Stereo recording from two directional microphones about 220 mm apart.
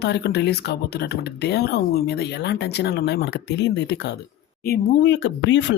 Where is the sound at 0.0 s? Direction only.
50° left (ahead or behind).